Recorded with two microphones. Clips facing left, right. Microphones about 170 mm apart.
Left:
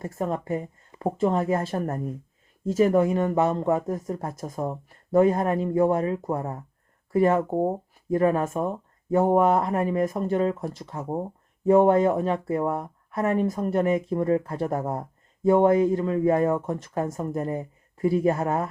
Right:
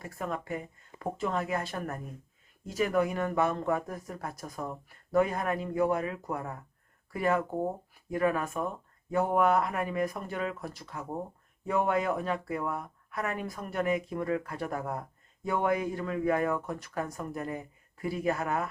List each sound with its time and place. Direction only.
0.0 s speech: 35° left (ahead or behind)